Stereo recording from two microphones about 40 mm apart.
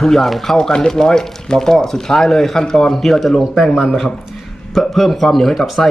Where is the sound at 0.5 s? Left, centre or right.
Centre.